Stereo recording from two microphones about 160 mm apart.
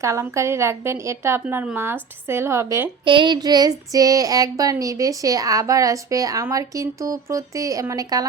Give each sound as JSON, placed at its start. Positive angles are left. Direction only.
{"t": 0.0, "sound": "a woman's voice", "side_deg": -20}
{"t": 3.0, "sound": "child singing", "side_deg": -30}